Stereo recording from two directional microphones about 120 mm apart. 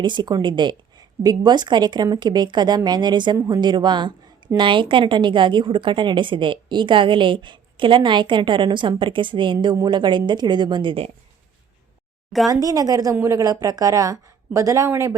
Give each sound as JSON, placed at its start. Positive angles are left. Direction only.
{"t": 0.0, "sound": "a woman's voice", "side_deg": -40}
{"t": 12.5, "sound": "speech", "side_deg": -30}